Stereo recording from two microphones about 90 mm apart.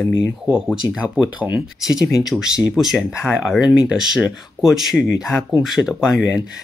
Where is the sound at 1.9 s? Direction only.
5° right (ahead or behind).